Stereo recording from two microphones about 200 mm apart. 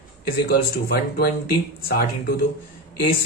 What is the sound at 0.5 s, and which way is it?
Speech, 50° left (ahead or behind).